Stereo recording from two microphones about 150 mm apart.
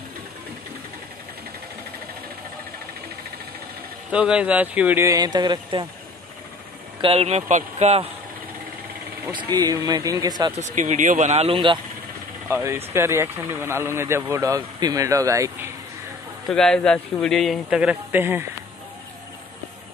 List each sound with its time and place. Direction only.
4.1 s speech: 10° right (ahead or behind); by 5.9 s 30° right (ahead or behind)
7.0 s speech: 40° right (ahead or behind)
9.3 s speech: 30° right (ahead or behind)
10.5 s speech: 50° right (ahead or behind); by 11.8 s 35° right (ahead or behind)
12.4 s speech: 20° right (ahead or behind)
16.4 s speech: 5° left (ahead or behind); by 18.5 s 15° right (ahead or behind)